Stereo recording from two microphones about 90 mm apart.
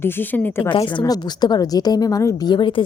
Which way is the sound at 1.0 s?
50° left (ahead or behind).